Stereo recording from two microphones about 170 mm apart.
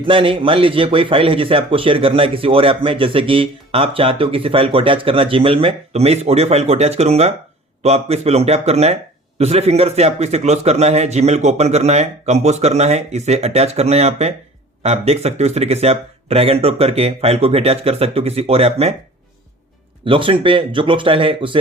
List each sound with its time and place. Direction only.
0.0 s a man's voice: 30° right (ahead or behind)
20.1 s speech: 30° right (ahead or behind)